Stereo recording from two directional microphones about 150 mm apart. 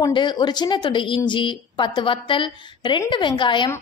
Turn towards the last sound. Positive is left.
turn(degrees=30)  # may be behind; listen again after turning